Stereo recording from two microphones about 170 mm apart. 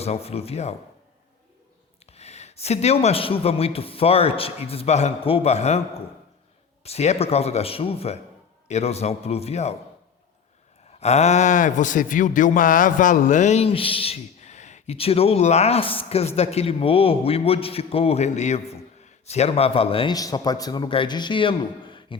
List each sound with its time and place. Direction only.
0.0 s speech: 35° left (ahead or behind)
2.0 s speech: 40° left (ahead or behind)
11.0 s speech: 40° left (ahead or behind)
20.1 s a man's voice: 25° left (ahead or behind)